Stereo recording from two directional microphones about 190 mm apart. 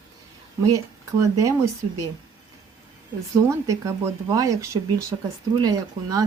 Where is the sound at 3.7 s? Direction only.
15° right (ahead or behind).